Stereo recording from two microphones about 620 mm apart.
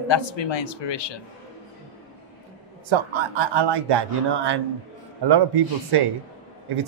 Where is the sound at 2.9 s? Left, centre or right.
Right.